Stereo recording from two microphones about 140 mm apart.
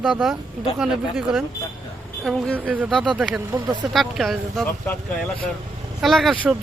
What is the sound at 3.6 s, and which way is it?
Speech, 30° right (ahead or behind).